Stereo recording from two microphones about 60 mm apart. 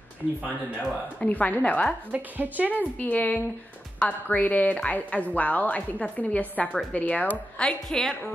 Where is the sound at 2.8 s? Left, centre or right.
Left; by 8.2 s centre.